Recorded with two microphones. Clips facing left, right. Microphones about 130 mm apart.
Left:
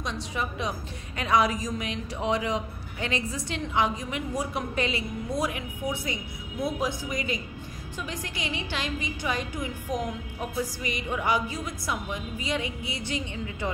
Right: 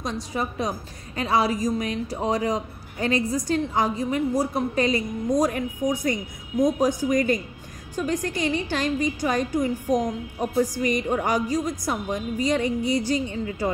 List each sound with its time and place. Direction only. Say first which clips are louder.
0.0 s a woman's voice: right 4 dB; 40° right (ahead or behind)